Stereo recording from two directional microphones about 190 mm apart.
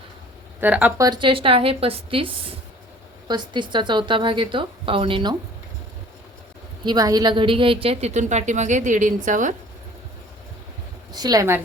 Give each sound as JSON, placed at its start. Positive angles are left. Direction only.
{"t": 0.6, "sound": "a woman's voice", "side_deg": -10}
{"t": 6.8, "sound": "a woman's voice", "side_deg": -20}
{"t": 11.1, "sound": "a woman's voice", "side_deg": -20}